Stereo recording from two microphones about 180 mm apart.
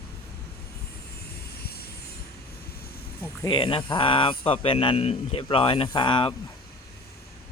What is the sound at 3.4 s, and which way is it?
Speech, 30° left (ahead or behind).